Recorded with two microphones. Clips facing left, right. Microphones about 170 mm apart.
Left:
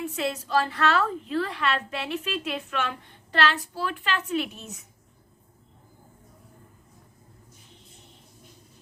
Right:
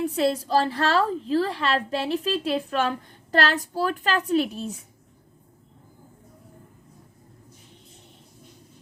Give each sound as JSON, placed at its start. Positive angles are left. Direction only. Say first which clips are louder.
{"t": 0.0, "sound": "a woman's voice", "louder": "right 6 dB", "side_deg": -35}